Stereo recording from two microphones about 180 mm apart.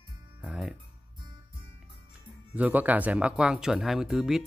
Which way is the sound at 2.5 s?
10° right (ahead or behind).